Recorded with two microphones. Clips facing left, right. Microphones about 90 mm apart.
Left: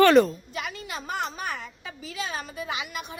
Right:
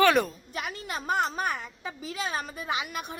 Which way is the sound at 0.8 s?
45° right (ahead or behind).